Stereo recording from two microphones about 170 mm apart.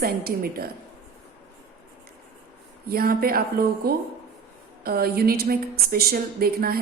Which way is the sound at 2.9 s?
65° right (ahead or behind).